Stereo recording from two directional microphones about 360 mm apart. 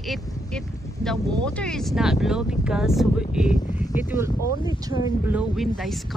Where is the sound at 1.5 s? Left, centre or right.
Centre.